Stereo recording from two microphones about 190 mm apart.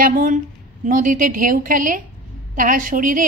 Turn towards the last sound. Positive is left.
turn(degrees=-45)  # may be behind; listen again after turning